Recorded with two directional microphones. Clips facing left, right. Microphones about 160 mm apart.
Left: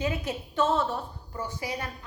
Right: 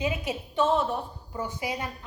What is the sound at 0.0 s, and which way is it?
A woman's voice, 15° right (ahead or behind).